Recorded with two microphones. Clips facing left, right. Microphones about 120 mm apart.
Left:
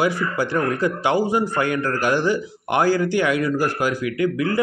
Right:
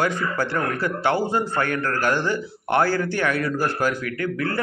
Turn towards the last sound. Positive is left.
turn(degrees=15)  # may be behind; listen again after turning